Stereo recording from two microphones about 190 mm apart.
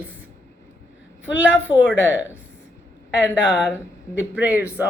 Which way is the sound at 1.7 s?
25° left (ahead or behind).